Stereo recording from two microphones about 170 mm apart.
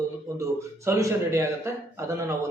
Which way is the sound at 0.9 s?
15° right (ahead or behind).